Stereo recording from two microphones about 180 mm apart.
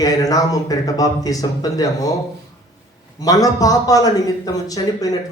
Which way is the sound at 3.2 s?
20° left (ahead or behind).